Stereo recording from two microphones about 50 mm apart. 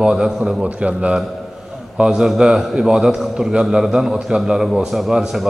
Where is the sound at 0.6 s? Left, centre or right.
Right.